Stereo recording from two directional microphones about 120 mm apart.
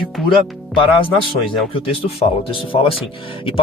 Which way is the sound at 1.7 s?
50° left (ahead or behind).